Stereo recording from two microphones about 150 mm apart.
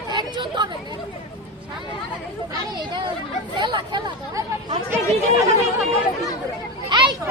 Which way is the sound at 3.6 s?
30° right (ahead or behind).